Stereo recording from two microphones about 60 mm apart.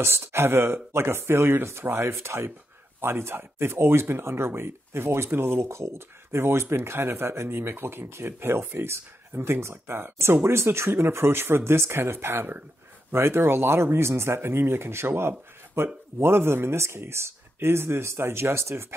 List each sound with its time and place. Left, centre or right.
0.0 s speech: right